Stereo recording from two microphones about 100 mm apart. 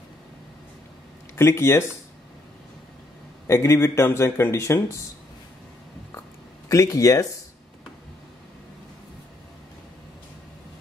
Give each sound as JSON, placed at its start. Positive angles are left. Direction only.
{"t": 1.3, "sound": "a man's voice", "side_deg": 25}
{"t": 3.4, "sound": "a man's voice", "side_deg": 30}
{"t": 6.7, "sound": "speech", "side_deg": 35}